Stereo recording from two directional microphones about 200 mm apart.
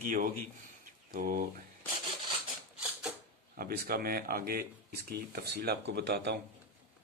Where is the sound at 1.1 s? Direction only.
45° right (ahead or behind).